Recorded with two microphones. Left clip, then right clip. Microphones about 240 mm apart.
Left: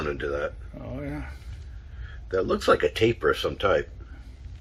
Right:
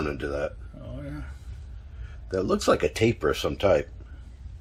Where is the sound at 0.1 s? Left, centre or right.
Right.